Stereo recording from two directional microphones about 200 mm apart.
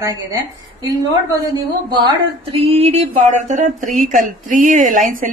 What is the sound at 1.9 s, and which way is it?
A woman's voice, 25° right (ahead or behind).